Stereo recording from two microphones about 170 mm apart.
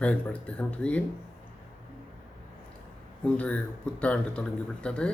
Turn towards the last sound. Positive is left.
turn(degrees=5)  # may be behind; listen again after turning